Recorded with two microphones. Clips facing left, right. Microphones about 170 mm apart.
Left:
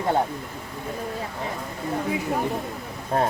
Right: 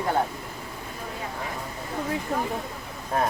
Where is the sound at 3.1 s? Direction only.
30° left (ahead or behind).